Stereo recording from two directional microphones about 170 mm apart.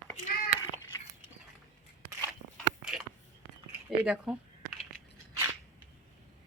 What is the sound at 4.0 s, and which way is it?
Speech, 5° right (ahead or behind).